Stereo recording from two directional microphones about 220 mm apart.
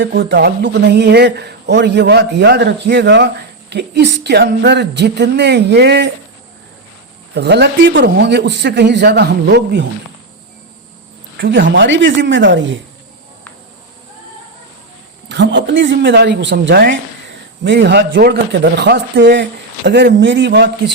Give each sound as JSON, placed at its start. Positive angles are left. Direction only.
{"t": 0.0, "sound": "a man's voice", "side_deg": -50}
{"t": 7.3, "sound": "a man's voice", "side_deg": -50}
{"t": 11.3, "sound": "a woman's voice", "side_deg": -50}
{"t": 15.3, "sound": "a man's voice", "side_deg": -55}